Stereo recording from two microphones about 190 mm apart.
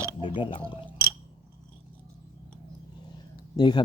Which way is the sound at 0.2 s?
25° left (ahead or behind).